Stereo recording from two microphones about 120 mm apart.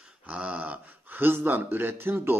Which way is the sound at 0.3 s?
10° right (ahead or behind).